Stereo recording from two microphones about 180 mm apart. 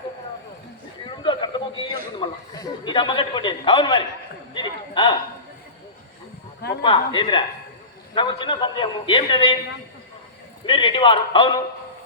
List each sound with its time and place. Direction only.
1.1 s a sound: 25° left (ahead or behind)
6.8 s a man's voice: 25° left (ahead or behind)
10.7 s a man's voice: 25° left (ahead or behind)